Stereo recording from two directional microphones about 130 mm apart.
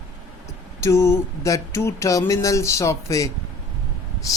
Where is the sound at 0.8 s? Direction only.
20° left (ahead or behind).